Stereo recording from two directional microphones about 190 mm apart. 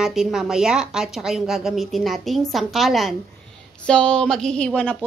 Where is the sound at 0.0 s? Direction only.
5° right (ahead or behind).